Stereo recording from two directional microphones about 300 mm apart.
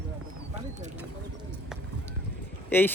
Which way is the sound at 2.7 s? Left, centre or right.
Centre.